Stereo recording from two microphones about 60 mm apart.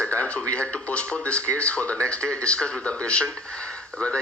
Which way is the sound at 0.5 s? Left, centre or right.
Centre.